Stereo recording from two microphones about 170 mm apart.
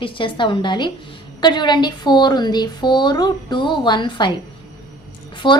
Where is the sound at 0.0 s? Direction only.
30° left (ahead or behind).